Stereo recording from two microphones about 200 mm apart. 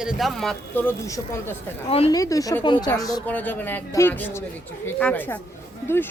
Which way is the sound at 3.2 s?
10° left (ahead or behind).